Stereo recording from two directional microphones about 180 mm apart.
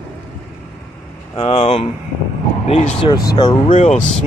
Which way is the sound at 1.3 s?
30° left (ahead or behind).